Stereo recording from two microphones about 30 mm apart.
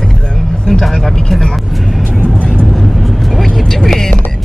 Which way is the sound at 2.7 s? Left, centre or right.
Centre.